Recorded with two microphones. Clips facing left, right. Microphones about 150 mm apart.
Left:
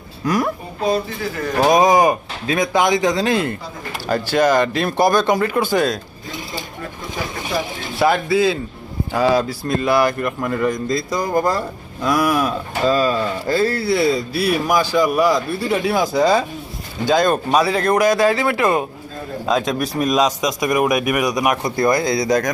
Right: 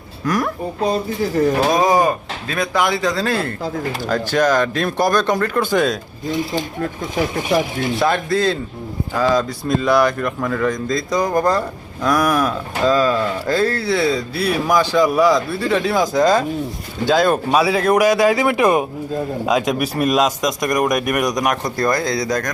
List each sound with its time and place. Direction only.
1.6 s speech: 20° left (ahead or behind); by 6.0 s centre (ahead or behind)
7.9 s a man's voice: 5° left (ahead or behind)
17.1 s a man's voice: 5° right (ahead or behind)